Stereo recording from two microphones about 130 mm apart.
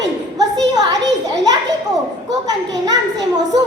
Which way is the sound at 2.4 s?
30° right (ahead or behind).